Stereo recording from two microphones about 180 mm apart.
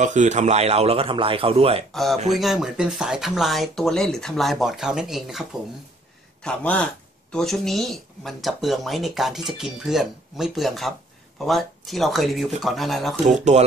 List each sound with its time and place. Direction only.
0.0 s a man's voice: 40° right (ahead or behind)
1.9 s a man's voice: centre (ahead or behind)
13.2 s a man's voice: 40° right (ahead or behind)